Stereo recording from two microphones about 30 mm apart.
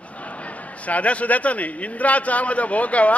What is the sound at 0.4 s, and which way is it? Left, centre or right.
A man's voice, left.